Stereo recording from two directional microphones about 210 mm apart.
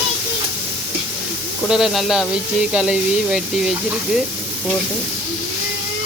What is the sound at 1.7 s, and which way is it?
Speech, centre (ahead or behind).